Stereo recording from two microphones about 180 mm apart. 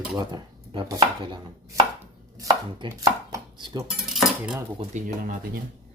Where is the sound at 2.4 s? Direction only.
20° right (ahead or behind).